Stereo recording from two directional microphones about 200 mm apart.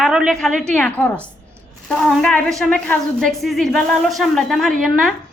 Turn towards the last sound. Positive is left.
turn(degrees=0)  # may be behind; listen again after turning